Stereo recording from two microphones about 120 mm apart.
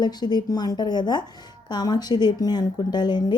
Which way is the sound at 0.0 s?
35° left (ahead or behind).